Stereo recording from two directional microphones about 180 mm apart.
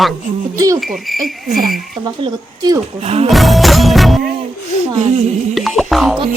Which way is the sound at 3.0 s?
35° right (ahead or behind).